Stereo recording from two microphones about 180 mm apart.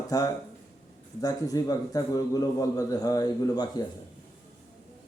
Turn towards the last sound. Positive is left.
turn(degrees=20)  # may be behind; listen again after turning